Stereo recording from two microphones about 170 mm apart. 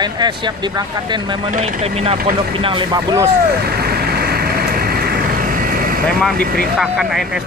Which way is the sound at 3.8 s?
65° right (ahead or behind).